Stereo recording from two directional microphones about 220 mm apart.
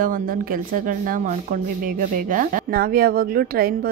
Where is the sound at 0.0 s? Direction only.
40° right (ahead or behind).